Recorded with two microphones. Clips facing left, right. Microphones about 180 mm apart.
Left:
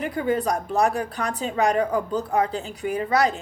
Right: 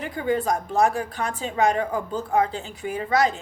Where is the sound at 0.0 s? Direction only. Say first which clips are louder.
Left 1 dB; 40° left (ahead or behind).